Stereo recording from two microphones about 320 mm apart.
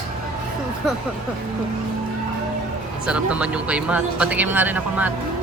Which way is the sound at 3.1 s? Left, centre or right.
Centre.